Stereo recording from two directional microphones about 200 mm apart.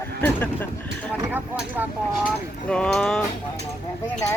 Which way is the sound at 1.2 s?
10° right (ahead or behind).